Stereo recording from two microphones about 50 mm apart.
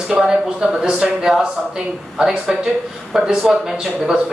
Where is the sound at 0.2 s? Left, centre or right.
Centre.